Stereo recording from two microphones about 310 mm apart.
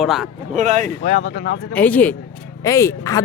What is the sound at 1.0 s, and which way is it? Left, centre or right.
Speech, left.